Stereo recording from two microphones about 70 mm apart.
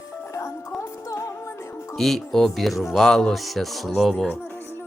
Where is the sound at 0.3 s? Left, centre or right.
Left.